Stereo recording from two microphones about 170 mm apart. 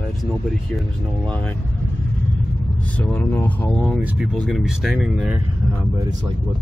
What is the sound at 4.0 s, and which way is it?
Speech, 10° right (ahead or behind).